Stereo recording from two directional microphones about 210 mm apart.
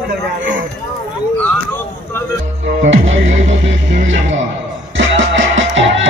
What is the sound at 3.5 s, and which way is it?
Music, 60° right (ahead or behind).